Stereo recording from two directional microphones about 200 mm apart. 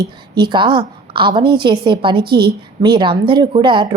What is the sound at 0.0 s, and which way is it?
A woman's voice, 20° right (ahead or behind).